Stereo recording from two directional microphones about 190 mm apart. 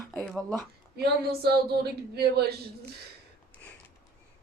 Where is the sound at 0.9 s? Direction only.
55° right (ahead or behind).